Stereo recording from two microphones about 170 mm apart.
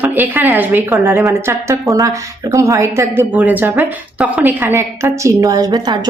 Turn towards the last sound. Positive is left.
turn(degrees=-25)  # may be behind; listen again after turning